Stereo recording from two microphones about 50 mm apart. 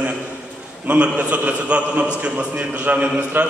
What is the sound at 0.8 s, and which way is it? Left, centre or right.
A man's voice, right.